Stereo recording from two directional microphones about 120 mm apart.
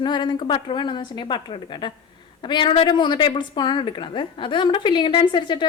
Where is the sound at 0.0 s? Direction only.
40° left (ahead or behind).